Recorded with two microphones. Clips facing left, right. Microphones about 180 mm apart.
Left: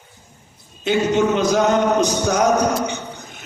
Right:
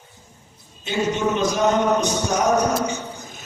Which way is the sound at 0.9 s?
90° left.